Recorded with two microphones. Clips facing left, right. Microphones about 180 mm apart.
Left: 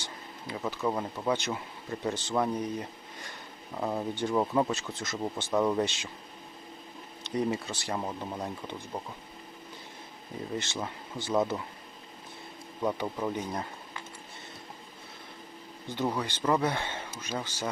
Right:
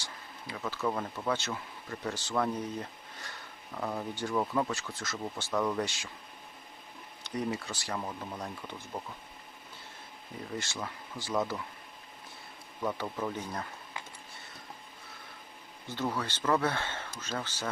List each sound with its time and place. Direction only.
0.0 s speech: 20° left (ahead or behind)
3.8 s speech: 20° left (ahead or behind)
7.3 s speech: 25° left (ahead or behind)
10.6 s speech: 20° left (ahead or behind)
12.8 s speech: 20° left (ahead or behind)
15.9 s speech: 15° left (ahead or behind)